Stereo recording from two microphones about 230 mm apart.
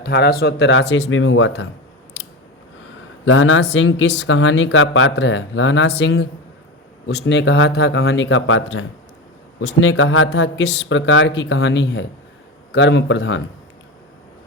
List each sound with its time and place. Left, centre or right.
0.0 s a man's voice: left
3.2 s a man's voice: left